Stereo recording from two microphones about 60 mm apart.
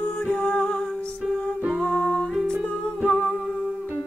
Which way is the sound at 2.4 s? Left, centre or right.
Centre.